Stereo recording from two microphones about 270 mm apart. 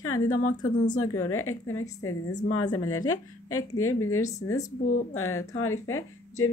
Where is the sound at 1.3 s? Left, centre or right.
Left.